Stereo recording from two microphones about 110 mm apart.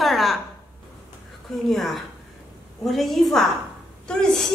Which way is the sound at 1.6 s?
Centre (ahead or behind).